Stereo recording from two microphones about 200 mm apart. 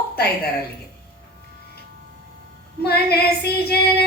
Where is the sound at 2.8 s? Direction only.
50° left (ahead or behind).